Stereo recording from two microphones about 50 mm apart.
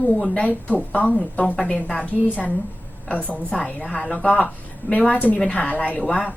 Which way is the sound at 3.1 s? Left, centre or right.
Left.